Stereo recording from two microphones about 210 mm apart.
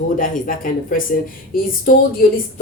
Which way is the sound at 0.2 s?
40° left (ahead or behind).